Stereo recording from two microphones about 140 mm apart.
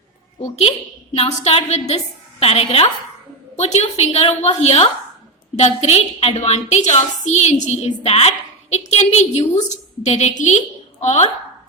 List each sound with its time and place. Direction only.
1.1 s a woman's voice: 45° left (ahead or behind)